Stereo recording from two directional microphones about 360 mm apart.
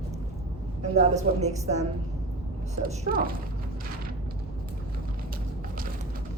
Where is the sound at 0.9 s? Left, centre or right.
Centre.